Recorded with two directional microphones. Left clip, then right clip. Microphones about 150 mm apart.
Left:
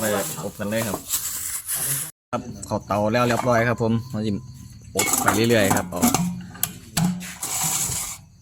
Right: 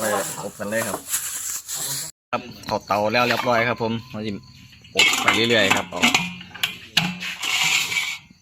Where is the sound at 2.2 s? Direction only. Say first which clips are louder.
Right 3 dB; 5° left (ahead or behind).